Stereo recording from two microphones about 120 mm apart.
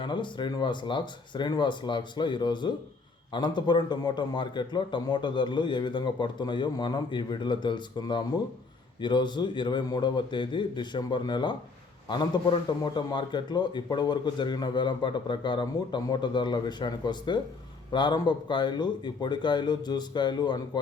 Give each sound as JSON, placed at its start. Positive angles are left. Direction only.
{"t": 0.0, "sound": "a man's voice", "side_deg": 40}